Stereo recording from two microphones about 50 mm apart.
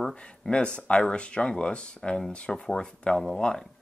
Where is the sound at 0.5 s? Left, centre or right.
Centre.